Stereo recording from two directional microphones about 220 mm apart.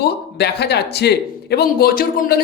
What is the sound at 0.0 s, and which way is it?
Speech, 50° left (ahead or behind).